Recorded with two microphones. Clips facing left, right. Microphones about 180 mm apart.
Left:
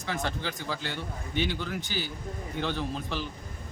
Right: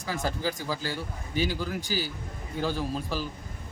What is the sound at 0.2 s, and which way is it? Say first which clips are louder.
Speech: right 3 dB; 40° right (ahead or behind).